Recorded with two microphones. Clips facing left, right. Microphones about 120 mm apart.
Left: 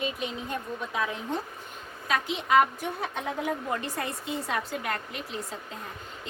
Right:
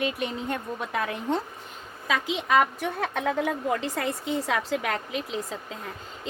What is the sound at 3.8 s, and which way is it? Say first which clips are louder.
A woman's voice: right 4 dB; 90° right.